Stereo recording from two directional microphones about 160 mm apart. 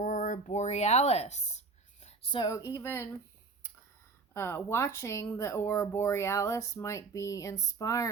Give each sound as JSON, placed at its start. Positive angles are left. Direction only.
{"t": 0.0, "sound": "a sound", "side_deg": 55}
{"t": 2.3, "sound": "speech", "side_deg": 25}
{"t": 4.4, "sound": "speech", "side_deg": 15}